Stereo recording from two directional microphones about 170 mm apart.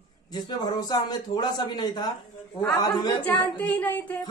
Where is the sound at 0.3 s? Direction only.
25° left (ahead or behind).